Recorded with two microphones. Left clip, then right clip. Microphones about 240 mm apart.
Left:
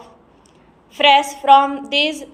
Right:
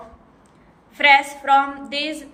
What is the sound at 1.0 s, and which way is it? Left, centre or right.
A woman's voice, centre.